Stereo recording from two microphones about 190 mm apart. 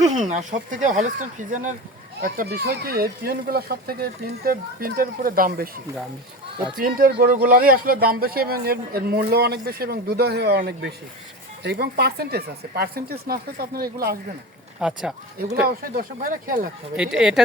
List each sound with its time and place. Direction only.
0.1 s a man's voice: 40° right (ahead or behind)
14.8 s speech: 5° right (ahead or behind)
15.6 s a man's voice: 50° right (ahead or behind)
17.0 s speech: 5° right (ahead or behind)